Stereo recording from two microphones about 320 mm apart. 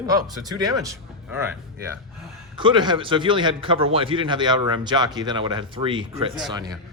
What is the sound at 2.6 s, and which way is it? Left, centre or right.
A man's voice, centre.